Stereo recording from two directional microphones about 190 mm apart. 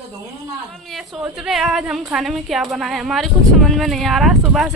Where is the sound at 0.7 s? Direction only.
Centre (ahead or behind).